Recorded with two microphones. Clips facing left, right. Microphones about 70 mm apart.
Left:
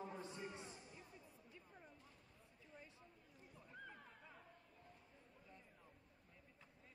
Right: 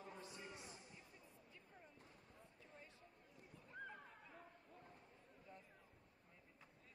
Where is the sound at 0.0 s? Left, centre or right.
Left.